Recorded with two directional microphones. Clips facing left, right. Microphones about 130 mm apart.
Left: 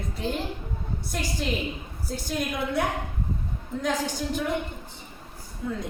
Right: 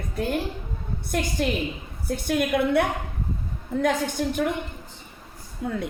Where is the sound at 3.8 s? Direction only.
60° right (ahead or behind).